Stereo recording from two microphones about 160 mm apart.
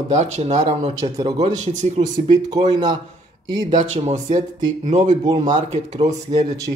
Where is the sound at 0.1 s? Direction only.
45° right (ahead or behind).